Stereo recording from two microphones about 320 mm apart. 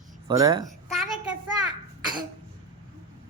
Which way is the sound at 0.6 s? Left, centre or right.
Centre.